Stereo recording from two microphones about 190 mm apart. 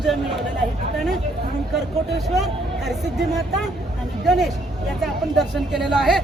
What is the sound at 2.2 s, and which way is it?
A woman's voice, centre (ahead or behind).